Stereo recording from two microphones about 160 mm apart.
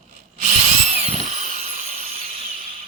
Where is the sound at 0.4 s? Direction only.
40° right (ahead or behind).